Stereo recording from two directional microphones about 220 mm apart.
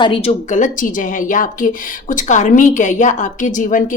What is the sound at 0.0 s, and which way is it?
A woman's voice, 25° left (ahead or behind).